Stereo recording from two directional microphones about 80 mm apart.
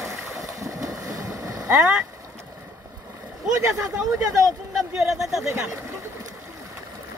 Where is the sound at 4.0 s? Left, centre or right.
Centre.